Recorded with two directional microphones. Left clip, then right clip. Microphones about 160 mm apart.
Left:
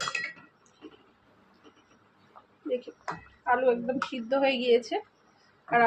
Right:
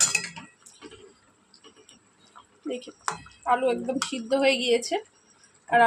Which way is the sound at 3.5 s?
50° right (ahead or behind).